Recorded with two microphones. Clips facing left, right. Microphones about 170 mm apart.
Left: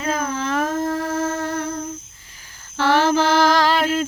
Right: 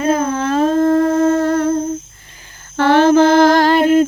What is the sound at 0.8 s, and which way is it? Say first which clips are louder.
Humming: right 10 dB; 55° right (ahead or behind).